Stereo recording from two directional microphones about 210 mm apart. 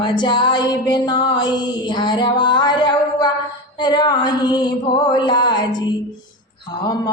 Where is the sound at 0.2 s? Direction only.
20° left (ahead or behind).